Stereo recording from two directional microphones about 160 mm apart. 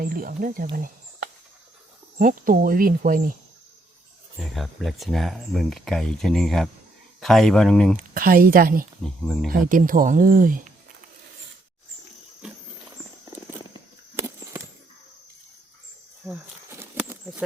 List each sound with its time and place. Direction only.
0.0 s speech: 60° right (ahead or behind)
2.1 s speech: 55° right (ahead or behind)
4.4 s speech: centre (ahead or behind)
7.9 s speech: 60° right (ahead or behind)
9.0 s speech: 5° left (ahead or behind)
9.5 s speech: 60° right (ahead or behind)
13.7 s a sound: 20° right (ahead or behind)
16.6 s a sound: 15° right (ahead or behind)